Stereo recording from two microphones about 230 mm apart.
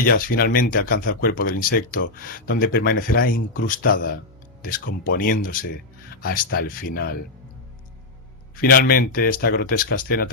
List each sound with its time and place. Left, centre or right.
0.0 s speech: left
8.6 s speech: left